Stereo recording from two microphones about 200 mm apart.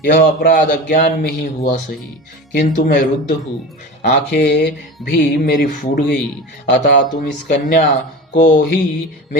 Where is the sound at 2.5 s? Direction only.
50° left (ahead or behind).